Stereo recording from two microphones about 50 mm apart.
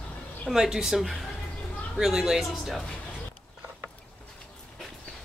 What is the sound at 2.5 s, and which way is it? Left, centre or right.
Speech, centre.